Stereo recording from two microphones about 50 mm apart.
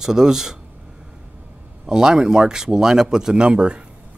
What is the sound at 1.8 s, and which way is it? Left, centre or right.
A man's voice, centre.